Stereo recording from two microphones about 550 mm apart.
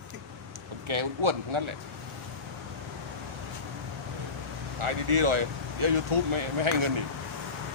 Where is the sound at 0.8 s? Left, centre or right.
Right.